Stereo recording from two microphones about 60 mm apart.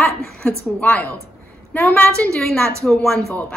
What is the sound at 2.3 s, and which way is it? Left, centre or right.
Speech, centre.